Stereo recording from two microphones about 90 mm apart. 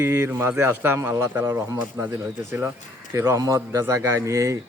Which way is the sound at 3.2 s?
35° right (ahead or behind).